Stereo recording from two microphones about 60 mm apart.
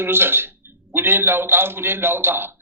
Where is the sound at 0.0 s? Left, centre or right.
Right.